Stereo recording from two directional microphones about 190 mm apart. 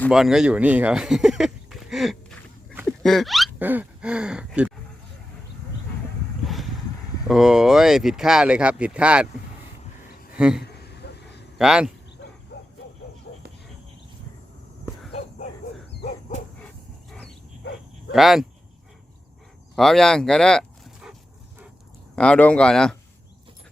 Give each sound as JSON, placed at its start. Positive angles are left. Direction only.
{"t": 0.1, "sound": "speech", "side_deg": -5}
{"t": 3.0, "sound": "hiccup", "side_deg": 0}
{"t": 7.3, "sound": "speech", "side_deg": 0}
{"t": 10.3, "sound": "speech", "side_deg": -5}
{"t": 10.6, "sound": "a sound", "side_deg": 60}
{"t": 11.5, "sound": "a man's voice", "side_deg": -5}
{"t": 12.5, "sound": "bow-wow", "side_deg": 60}
{"t": 18.1, "sound": "speech", "side_deg": 0}
{"t": 19.7, "sound": "speech", "side_deg": 0}